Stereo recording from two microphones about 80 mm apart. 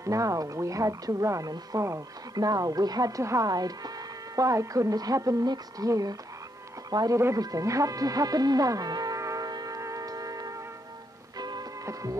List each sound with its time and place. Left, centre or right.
0.0 s speech: right
9.8 s music: right
11.8 s music: right